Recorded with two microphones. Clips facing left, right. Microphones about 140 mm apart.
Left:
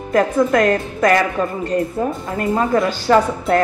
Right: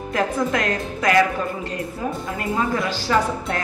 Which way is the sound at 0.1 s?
50° left (ahead or behind).